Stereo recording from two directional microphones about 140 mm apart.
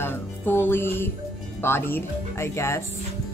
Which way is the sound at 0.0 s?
15° left (ahead or behind).